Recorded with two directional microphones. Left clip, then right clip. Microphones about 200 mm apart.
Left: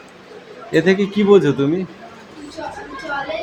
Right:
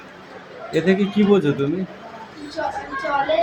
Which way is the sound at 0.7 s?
25° left (ahead or behind).